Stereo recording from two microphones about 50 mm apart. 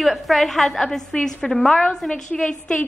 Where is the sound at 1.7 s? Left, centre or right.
Centre.